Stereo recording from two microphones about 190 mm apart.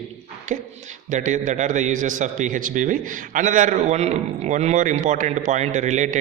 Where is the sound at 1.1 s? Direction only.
40° right (ahead or behind).